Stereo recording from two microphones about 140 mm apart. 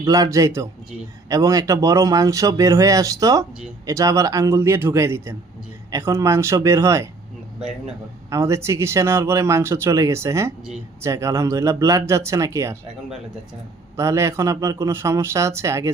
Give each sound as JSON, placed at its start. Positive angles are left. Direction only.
{"t": 0.0, "sound": "speech", "side_deg": -25}
{"t": 8.3, "sound": "speech", "side_deg": -20}
{"t": 13.9, "sound": "speech", "side_deg": -20}